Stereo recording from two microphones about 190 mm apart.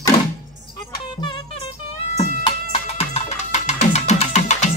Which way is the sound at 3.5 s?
35° left (ahead or behind).